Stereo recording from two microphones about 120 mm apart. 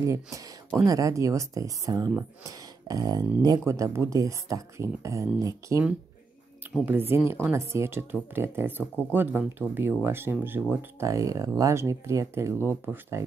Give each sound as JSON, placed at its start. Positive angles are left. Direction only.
{"t": 0.0, "sound": "speech", "side_deg": -25}
{"t": 6.9, "sound": "speech", "side_deg": -15}